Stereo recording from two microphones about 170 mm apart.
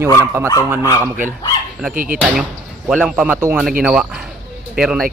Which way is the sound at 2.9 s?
5° right (ahead or behind).